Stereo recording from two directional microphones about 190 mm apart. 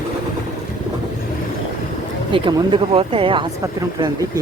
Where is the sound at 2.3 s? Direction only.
25° right (ahead or behind).